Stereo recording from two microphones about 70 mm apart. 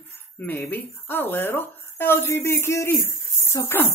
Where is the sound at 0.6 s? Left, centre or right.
Left.